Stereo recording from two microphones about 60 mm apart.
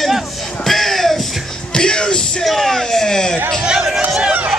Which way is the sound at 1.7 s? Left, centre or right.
Centre.